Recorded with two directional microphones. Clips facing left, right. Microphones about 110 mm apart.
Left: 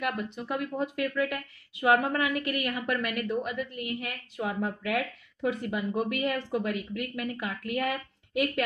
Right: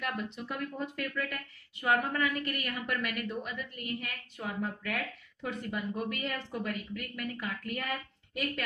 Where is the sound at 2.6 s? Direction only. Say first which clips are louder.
Left 5 dB; 70° left (ahead or behind).